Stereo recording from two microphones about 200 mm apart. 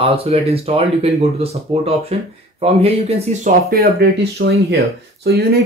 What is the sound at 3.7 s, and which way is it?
Speech, 50° right (ahead or behind).